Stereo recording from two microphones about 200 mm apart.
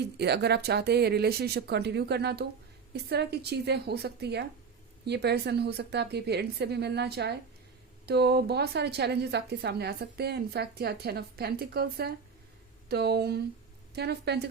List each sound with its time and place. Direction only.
0.0 s a woman's voice: 55° right (ahead or behind)